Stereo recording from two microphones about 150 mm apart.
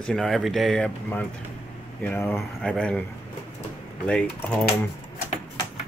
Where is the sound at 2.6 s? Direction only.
5° left (ahead or behind).